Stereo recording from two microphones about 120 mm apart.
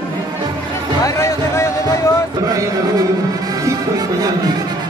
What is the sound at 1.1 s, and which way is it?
Music, 25° left (ahead or behind).